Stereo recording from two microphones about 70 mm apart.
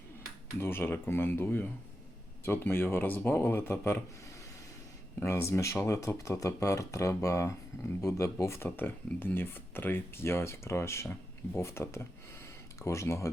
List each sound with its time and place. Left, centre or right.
0.6 s speech: left
5.2 s speech: left